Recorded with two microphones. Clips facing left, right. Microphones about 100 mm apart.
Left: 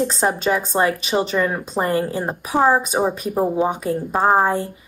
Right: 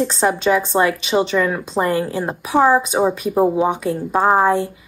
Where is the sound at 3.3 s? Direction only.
10° right (ahead or behind).